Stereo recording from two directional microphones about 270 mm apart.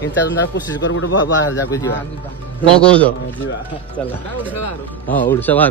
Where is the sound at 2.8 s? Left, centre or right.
Centre.